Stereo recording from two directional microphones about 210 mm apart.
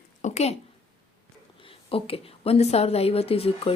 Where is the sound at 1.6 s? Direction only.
25° left (ahead or behind).